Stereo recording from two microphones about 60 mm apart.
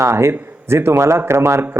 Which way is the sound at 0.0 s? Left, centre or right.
Right.